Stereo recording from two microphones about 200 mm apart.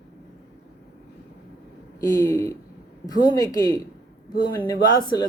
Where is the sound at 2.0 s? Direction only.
15° left (ahead or behind).